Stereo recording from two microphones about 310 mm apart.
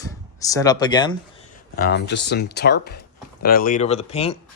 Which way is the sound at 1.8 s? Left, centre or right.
Left.